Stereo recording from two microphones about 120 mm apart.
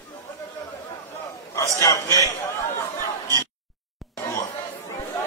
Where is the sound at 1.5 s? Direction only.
30° left (ahead or behind).